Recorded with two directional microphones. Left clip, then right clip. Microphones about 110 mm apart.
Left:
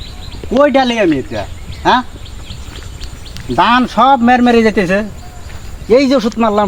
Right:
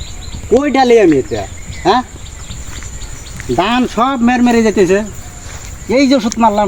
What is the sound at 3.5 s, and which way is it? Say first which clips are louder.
Speech: left 3 dB; 45° left (ahead or behind).